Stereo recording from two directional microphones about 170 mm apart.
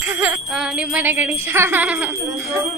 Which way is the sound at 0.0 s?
10° right (ahead or behind).